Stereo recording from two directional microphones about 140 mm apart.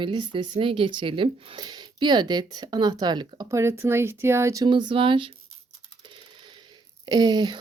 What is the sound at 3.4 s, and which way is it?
Speech, 20° right (ahead or behind).